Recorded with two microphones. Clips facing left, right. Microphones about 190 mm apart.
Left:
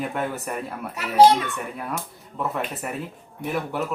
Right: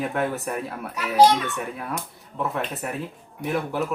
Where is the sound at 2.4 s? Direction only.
Centre (ahead or behind).